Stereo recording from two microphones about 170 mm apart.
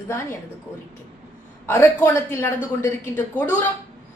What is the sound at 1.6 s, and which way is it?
A woman's voice, 15° left (ahead or behind).